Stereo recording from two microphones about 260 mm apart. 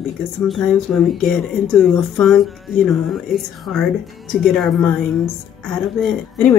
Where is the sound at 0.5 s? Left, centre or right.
Centre.